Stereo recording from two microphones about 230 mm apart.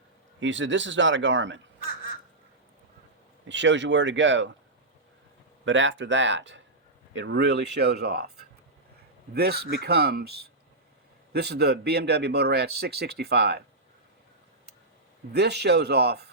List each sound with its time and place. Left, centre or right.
0.3 s a man's voice: right
3.5 s a man's voice: right
5.6 s a man's voice: right
15.3 s a man's voice: right